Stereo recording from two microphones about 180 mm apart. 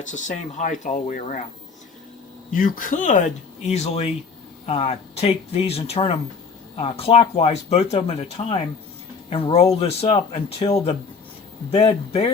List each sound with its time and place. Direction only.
0.1 s speech: 45° left (ahead or behind)
2.5 s speech: 50° left (ahead or behind); by 10.7 s 30° left (ahead or behind)
11.7 s speech: 35° left (ahead or behind)